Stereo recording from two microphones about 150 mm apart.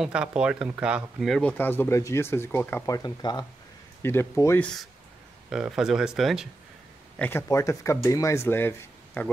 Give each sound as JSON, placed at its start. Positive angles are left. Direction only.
{"t": 0.0, "sound": "speech", "side_deg": -5}
{"t": 1.4, "sound": "speech", "side_deg": 15}
{"t": 3.0, "sound": "speech", "side_deg": 30}
{"t": 4.0, "sound": "speech", "side_deg": 15}
{"t": 5.5, "sound": "speech", "side_deg": -5}
{"t": 7.2, "sound": "speech", "side_deg": 15}